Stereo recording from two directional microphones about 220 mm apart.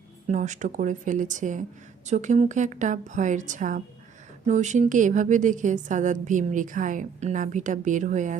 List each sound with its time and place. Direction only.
0.3 s a woman's voice: 35° right (ahead or behind)